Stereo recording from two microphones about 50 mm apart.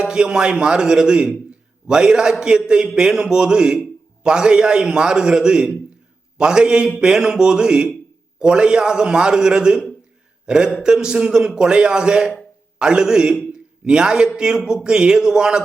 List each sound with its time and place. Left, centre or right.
0.0 s a man's voice: centre